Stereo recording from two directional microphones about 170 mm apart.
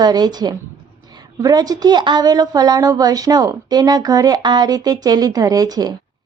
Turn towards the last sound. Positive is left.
turn(degrees=-25)  # may be behind; listen again after turning